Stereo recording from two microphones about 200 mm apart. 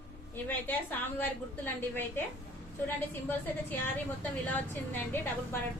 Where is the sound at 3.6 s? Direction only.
10° left (ahead or behind).